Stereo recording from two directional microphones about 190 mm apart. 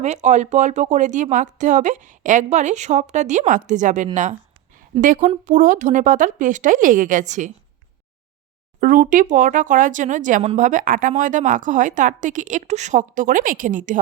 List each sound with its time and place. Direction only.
0.0 s speech: 40° right (ahead or behind)
8.8 s speech: 45° right (ahead or behind)